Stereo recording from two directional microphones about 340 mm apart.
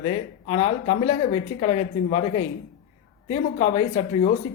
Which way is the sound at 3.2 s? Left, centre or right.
Centre.